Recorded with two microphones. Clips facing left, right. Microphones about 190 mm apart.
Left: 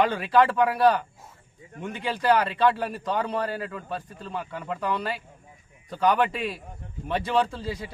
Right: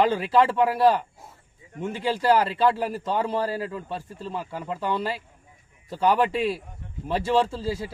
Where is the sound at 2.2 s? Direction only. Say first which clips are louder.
Right 1 dB; 25° right (ahead or behind).